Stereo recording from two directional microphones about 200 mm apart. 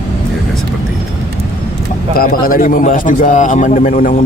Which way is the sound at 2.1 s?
45° left (ahead or behind).